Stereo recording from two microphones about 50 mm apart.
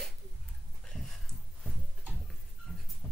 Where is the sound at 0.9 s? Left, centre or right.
Centre.